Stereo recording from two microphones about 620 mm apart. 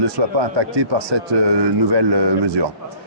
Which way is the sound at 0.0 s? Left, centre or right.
Right.